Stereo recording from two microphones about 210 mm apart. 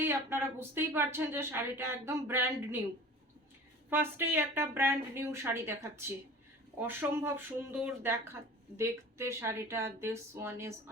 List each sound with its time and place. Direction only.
0.0 s speech: 10° right (ahead or behind)
3.8 s speech: 10° right (ahead or behind)